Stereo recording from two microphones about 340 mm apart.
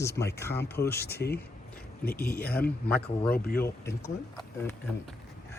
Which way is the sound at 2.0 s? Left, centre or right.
Left.